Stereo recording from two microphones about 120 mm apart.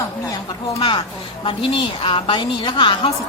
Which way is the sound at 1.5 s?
45° left (ahead or behind).